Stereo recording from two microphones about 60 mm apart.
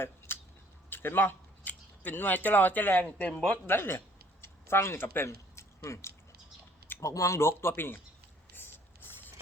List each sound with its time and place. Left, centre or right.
0.9 s speech: left
3.5 s speech: left
7.0 s speech: left
7.3 s speech: left
8.5 s a sound: left